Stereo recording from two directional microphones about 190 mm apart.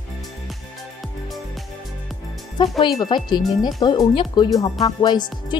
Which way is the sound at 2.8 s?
25° left (ahead or behind).